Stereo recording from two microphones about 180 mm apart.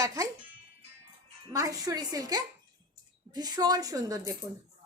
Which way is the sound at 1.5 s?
20° right (ahead or behind).